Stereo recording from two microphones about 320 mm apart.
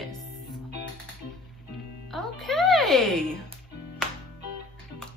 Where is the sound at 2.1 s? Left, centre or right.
Centre.